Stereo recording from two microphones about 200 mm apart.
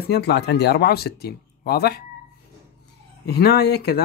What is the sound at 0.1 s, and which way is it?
Speech, 55° left (ahead or behind).